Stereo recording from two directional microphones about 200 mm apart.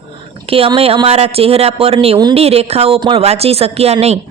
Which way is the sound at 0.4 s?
30° right (ahead or behind).